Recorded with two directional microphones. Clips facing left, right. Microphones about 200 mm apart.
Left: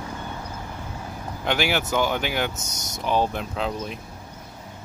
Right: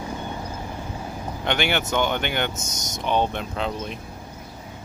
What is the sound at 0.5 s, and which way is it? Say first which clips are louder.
Vehicle: right 3 dB; 15° right (ahead or behind).